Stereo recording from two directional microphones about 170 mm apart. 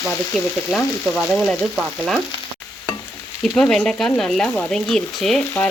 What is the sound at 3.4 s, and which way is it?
Speech, 5° left (ahead or behind).